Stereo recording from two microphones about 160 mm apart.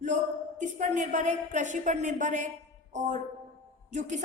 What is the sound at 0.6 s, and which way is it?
A woman's voice, 50° right (ahead or behind).